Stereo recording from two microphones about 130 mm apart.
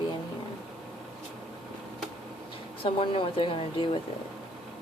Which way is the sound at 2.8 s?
40° left (ahead or behind).